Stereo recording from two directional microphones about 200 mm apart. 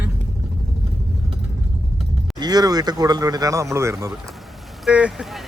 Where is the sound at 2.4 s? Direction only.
20° right (ahead or behind).